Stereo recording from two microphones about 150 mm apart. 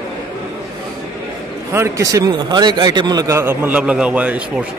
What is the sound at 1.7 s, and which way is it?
Speech, 20° right (ahead or behind).